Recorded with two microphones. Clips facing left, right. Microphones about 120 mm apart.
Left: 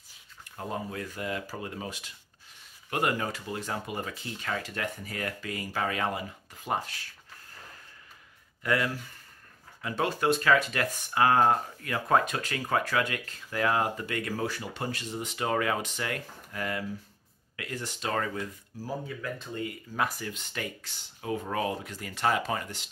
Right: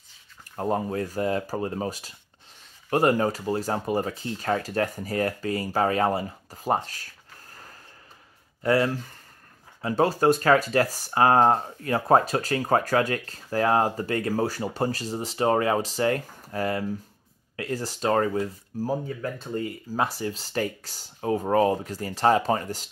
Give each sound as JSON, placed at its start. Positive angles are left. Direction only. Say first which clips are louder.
{"t": 0.6, "sound": "speech", "louder": "right 9 dB", "side_deg": -40}
{"t": 8.6, "sound": "speech", "louder": "right 6 dB", "side_deg": -35}